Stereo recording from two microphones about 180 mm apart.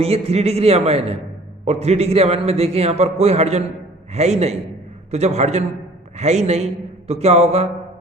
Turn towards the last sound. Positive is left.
turn(degrees=-35)  # may be behind; listen again after turning